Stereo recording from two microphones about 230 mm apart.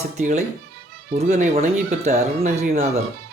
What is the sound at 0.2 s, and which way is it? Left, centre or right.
Speech, right.